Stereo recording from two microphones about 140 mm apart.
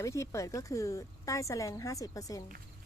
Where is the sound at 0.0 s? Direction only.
20° left (ahead or behind).